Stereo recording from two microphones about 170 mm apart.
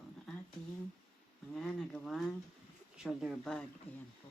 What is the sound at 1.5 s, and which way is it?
Speech, 5° left (ahead or behind).